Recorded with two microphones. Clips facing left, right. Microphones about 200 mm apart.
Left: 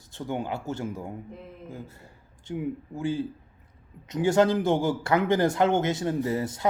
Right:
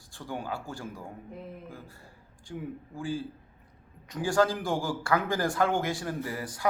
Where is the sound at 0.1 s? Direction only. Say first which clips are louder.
Left 5 dB; 25° left (ahead or behind).